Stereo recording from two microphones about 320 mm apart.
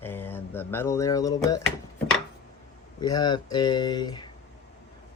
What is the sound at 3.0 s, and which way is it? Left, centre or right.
Speech, centre.